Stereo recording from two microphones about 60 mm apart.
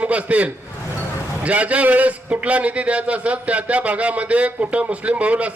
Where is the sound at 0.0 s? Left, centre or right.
Right.